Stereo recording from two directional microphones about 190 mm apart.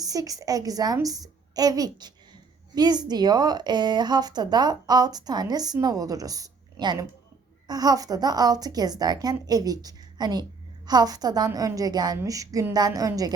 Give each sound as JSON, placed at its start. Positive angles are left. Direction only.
{"t": 0.0, "sound": "a woman's voice", "side_deg": -20}